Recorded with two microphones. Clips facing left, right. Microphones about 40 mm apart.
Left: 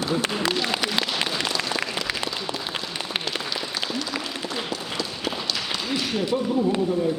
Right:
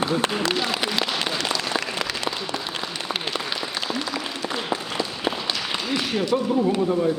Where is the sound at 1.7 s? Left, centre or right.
Right.